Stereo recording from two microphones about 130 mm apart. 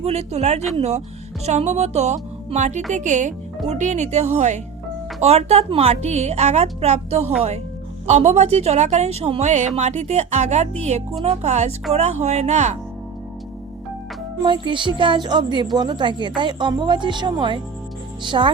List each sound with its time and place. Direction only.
0.0 s a woman's voice: 55° right (ahead or behind)
14.4 s speech: 40° right (ahead or behind)